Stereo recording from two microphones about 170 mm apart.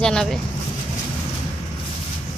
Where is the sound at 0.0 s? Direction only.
5° left (ahead or behind).